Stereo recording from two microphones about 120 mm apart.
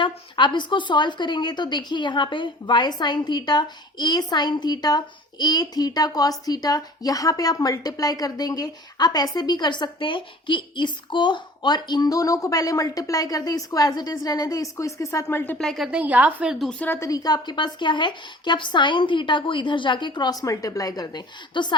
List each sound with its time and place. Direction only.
0.0 s a woman's voice: 40° left (ahead or behind); by 15.5 s 20° left (ahead or behind)
15.5 s a woman's voice: 5° left (ahead or behind)
15.9 s a woman's voice: 10° right (ahead or behind)
16.6 s speech: 15° left (ahead or behind)
17.0 s a woman's voice: 30° left (ahead or behind)